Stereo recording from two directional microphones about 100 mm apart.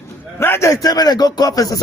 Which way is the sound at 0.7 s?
40° left (ahead or behind).